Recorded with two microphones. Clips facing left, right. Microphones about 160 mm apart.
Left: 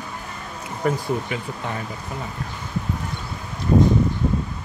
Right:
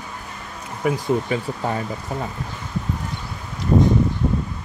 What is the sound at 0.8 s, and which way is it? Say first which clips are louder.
Speech: right 1 dB; 5° right (ahead or behind).